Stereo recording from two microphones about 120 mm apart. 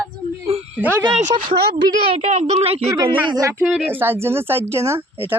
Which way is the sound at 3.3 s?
30° right (ahead or behind).